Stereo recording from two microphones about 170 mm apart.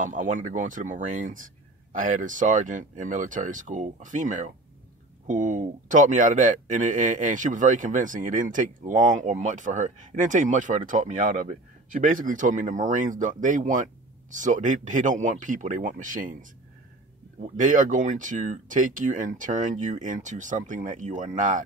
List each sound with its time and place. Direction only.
0.0 s speech: 50° right (ahead or behind)
17.6 s speech: 50° right (ahead or behind)